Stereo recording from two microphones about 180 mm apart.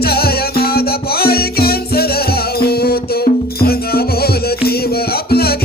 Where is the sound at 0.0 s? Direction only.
60° left (ahead or behind).